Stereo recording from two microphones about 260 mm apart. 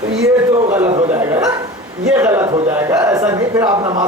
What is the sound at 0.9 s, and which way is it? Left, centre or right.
Speech, right.